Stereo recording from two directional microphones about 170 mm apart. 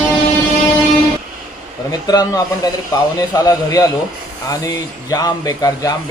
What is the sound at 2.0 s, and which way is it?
A man's voice, 20° left (ahead or behind).